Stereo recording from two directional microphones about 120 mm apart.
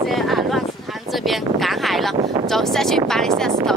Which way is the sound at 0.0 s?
Centre (ahead or behind).